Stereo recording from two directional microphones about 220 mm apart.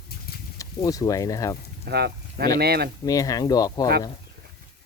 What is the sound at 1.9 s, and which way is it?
Speech, 45° right (ahead or behind).